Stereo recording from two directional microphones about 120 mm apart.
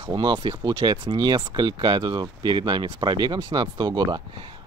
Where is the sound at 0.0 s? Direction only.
40° right (ahead or behind).